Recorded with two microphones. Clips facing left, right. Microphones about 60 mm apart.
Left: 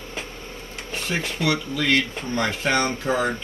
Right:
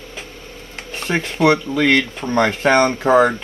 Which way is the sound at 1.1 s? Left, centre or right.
Right.